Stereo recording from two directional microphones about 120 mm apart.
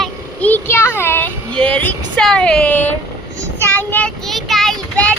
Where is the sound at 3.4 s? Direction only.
15° left (ahead or behind).